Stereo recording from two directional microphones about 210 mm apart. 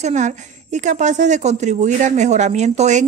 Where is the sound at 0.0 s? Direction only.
35° right (ahead or behind).